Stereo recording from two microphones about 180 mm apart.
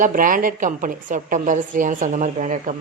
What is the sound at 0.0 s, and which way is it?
A woman's voice, 50° right (ahead or behind).